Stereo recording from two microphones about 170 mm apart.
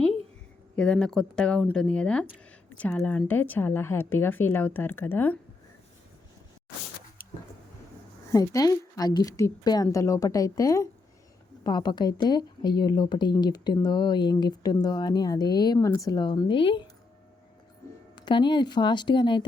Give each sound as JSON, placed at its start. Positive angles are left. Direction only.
{"t": 0.8, "sound": "a woman's voice", "side_deg": 5}
{"t": 8.3, "sound": "speech", "side_deg": 20}
{"t": 18.3, "sound": "speech", "side_deg": 25}